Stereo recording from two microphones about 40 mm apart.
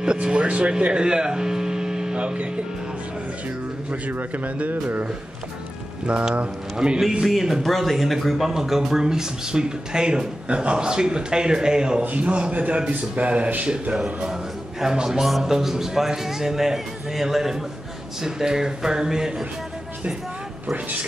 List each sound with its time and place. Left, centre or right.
0.0 s speech: right
2.1 s speech: right
4.6 s a man's voice: right
6.3 s speech: right
7.2 s speech: centre
12.0 s a man's voice: right
13.9 s speech: centre
15.2 s speech: centre
15.5 s speech: centre